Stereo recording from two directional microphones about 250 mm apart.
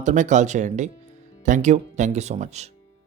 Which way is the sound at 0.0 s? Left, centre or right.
Right.